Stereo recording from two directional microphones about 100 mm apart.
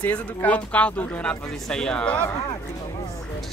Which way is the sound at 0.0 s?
15° left (ahead or behind).